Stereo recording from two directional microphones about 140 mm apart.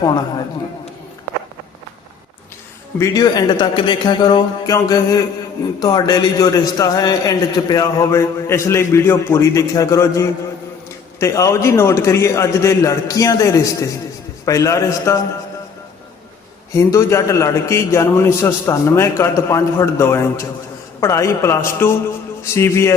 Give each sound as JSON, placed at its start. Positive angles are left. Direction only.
{"t": 3.0, "sound": "a man's voice", "side_deg": 25}
{"t": 16.7, "sound": "a man's voice", "side_deg": 20}